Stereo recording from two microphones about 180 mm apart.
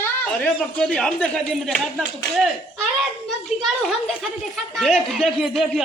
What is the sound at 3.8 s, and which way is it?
Speech, centre (ahead or behind).